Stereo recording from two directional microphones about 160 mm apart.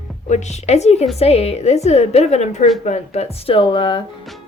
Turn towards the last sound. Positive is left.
turn(degrees=30)  # may be behind; listen again after turning